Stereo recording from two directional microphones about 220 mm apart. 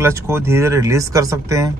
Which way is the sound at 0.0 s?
10° right (ahead or behind).